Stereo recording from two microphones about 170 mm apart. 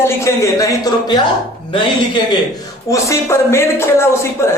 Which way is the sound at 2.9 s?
15° left (ahead or behind).